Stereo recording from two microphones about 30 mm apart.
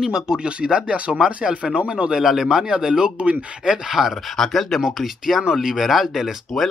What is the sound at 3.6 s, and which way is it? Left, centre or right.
Speech, centre.